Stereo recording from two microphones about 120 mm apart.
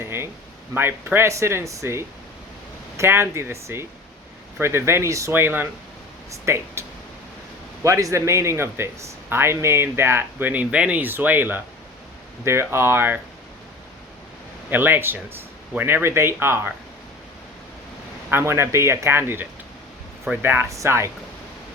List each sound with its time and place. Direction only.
0.0 s a sound: 20° right (ahead or behind)
0.7 s speech: 20° right (ahead or behind)
7.9 s speech: 25° right (ahead or behind)
14.7 s speech: 15° right (ahead or behind)
18.3 s speech: 20° right (ahead or behind)